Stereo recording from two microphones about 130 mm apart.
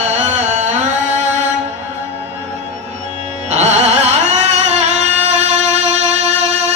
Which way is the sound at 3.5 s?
65° right (ahead or behind).